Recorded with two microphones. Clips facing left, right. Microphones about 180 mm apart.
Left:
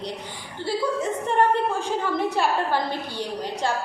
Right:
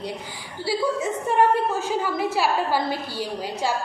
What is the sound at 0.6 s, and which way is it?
A woman's voice, 10° right (ahead or behind).